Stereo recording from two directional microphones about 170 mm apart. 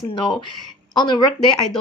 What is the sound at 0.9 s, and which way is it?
Speech, 25° left (ahead or behind).